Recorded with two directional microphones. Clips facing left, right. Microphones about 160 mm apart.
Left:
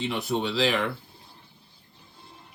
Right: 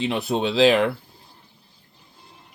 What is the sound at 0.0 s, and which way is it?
Speech, 90° right.